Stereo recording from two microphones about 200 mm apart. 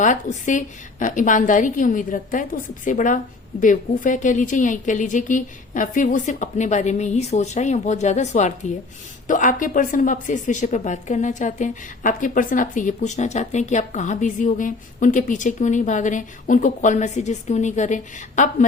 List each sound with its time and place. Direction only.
0.0 s speech: 40° left (ahead or behind)